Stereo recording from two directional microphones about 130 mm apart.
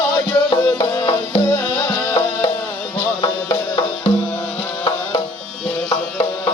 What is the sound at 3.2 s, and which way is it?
Music, 40° left (ahead or behind).